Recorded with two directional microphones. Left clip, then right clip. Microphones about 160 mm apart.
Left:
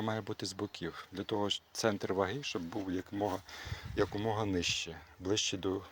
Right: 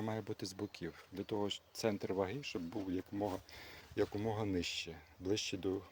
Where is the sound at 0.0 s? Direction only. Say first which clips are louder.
Left 5 dB; 10° right (ahead or behind).